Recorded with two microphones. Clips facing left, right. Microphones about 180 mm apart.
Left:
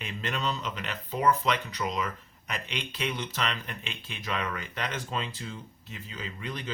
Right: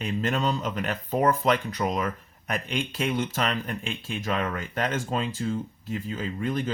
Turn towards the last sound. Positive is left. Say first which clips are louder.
# right 9 dB
turn(degrees=-45)  # may be behind; listen again after turning